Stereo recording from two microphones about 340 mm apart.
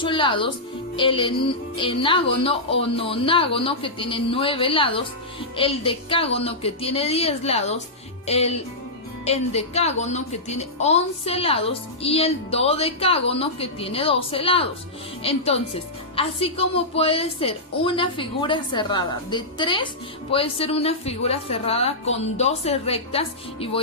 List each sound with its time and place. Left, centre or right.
0.0 s speech: centre